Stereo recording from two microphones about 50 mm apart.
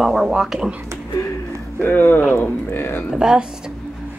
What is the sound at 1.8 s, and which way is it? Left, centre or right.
Speech, left.